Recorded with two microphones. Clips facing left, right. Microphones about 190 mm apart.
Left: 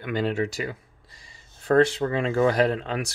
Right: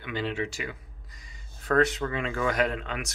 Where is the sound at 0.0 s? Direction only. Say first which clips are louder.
Left 6 dB; 45° left (ahead or behind).